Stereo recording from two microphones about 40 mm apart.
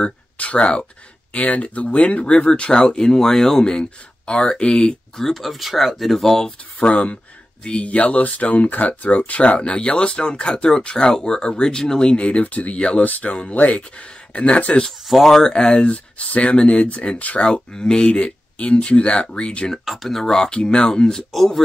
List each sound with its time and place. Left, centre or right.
0.0 s speech: left; by 3.6 s centre
3.6 s speech: left
5.1 s speech: centre
6.8 s speech: left; by 12.2 s centre
12.2 s speech: left
15.0 s speech: centre
15.9 s speech: left
19.8 s speech: centre
20.4 s speech: left
21.1 s speech: centre